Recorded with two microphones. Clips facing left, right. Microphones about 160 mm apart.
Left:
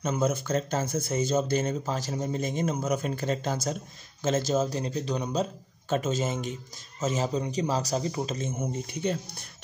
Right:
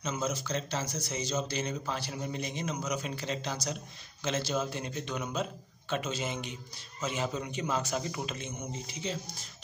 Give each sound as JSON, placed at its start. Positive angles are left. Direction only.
{"t": 0.0, "sound": "speech", "side_deg": 55}